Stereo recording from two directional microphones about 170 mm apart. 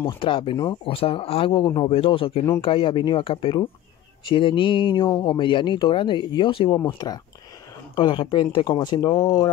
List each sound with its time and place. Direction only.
0.0 s speech: 30° left (ahead or behind)